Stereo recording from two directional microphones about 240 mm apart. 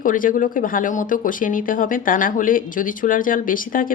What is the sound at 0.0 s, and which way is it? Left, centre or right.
Speech, left.